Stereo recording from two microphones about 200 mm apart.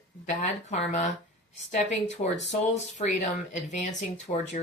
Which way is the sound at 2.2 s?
30° left (ahead or behind).